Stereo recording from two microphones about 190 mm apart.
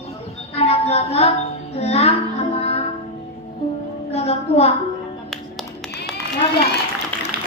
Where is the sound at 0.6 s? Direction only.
35° left (ahead or behind).